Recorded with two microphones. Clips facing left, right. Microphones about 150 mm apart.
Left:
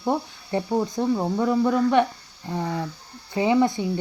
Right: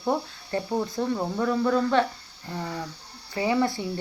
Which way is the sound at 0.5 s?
20° left (ahead or behind).